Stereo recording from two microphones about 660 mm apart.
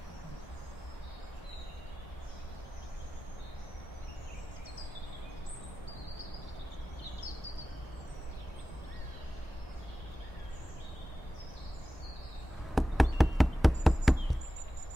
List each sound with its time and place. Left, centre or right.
12.7 s insect: centre